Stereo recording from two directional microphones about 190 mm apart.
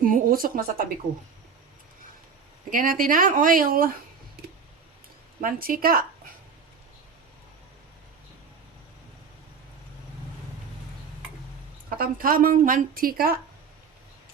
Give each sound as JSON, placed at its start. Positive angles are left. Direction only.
{"t": 0.0, "sound": "speech", "side_deg": -50}
{"t": 2.6, "sound": "speech", "side_deg": -45}
{"t": 5.4, "sound": "speech", "side_deg": -50}
{"t": 11.9, "sound": "speech", "side_deg": -50}